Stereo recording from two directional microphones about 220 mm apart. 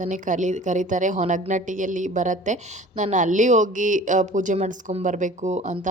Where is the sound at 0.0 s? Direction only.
35° right (ahead or behind).